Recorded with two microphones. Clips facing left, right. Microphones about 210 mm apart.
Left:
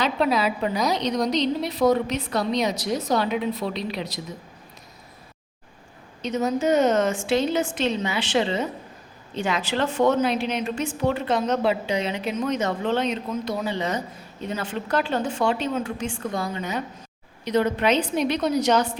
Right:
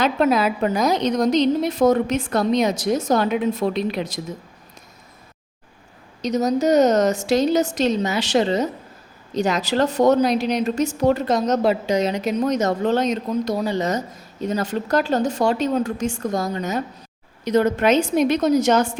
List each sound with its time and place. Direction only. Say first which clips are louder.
0.0 s a woman's voice: right 4 dB; 50° right (ahead or behind)
6.2 s a woman's voice: right 4 dB; 40° right (ahead or behind)